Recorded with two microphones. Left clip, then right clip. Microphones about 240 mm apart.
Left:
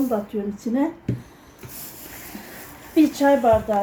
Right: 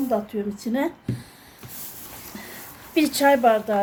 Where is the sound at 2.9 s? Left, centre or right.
Right.